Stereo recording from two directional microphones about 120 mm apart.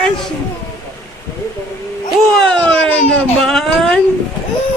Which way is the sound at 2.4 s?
5° left (ahead or behind).